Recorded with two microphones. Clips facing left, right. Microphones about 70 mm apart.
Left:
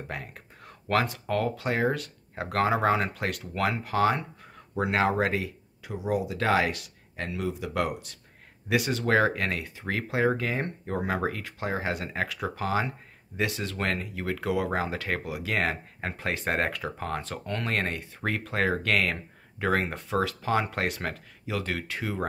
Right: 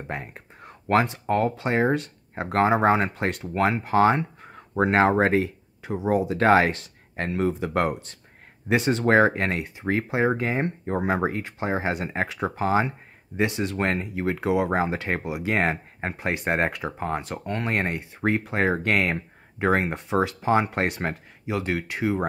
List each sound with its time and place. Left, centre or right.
0.1 s speech: right